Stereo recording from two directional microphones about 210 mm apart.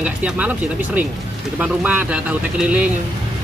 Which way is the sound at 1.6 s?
5° right (ahead or behind).